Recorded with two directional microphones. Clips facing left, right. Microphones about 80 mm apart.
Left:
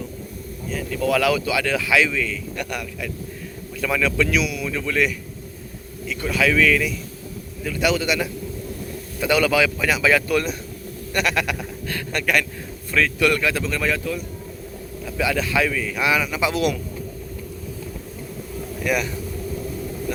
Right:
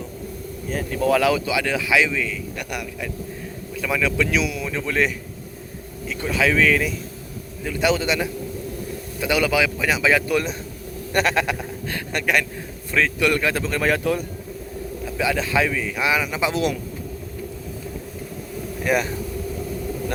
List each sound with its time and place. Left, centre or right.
0.7 s a man's voice: right
6.2 s a man's voice: right
9.2 s a man's voice: centre
11.1 s a man's voice: right
13.5 s speech: right
15.0 s a man's voice: right
18.9 s speech: right